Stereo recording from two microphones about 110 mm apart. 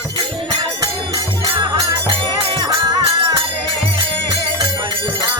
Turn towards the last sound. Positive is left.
turn(degrees=-55)  # may be behind; listen again after turning